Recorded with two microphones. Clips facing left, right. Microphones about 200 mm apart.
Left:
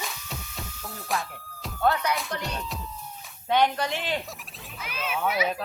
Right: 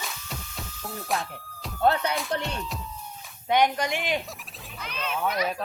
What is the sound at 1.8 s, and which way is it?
Speech, 30° right (ahead or behind).